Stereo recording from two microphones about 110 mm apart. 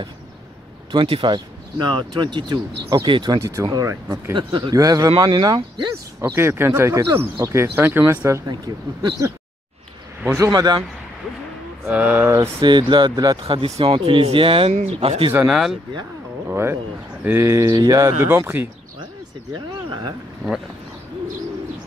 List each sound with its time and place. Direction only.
0.9 s speech: 50° right (ahead or behind)
3.3 s speech: 30° right (ahead or behind)
6.2 s speech: 20° right (ahead or behind)
8.7 s speech: 40° right (ahead or behind)
10.3 s speech: 30° right (ahead or behind)
11.8 s speech: 15° right (ahead or behind)
12.4 s speech: 40° right (ahead or behind)
13.7 s speech: 65° right (ahead or behind)
14.7 s speech: 90° right
15.0 s speech: 55° right (ahead or behind)
15.4 s speech: 5° right (ahead or behind)
16.4 s speech: 20° right (ahead or behind)
18.5 s speech: 15° right (ahead or behind)
19.9 s speech: 40° right (ahead or behind)